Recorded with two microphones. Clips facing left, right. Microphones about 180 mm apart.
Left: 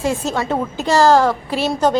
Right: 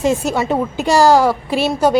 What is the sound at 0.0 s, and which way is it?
A woman's voice, 15° right (ahead or behind).